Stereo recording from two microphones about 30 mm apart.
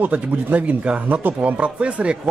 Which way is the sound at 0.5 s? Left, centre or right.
Right.